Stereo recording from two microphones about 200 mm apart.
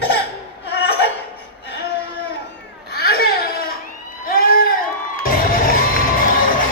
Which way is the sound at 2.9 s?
50° left (ahead or behind).